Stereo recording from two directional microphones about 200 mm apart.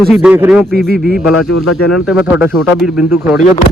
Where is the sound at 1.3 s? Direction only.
90° left.